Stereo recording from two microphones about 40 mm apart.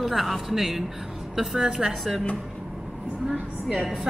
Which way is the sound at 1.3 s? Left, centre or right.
Centre.